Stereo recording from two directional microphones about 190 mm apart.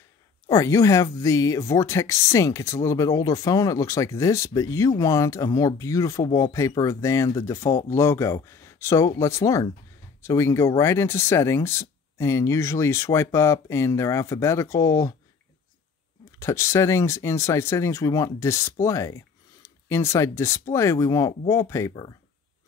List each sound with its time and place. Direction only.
0.5 s speech: 15° left (ahead or behind)
16.3 s speech: 15° left (ahead or behind)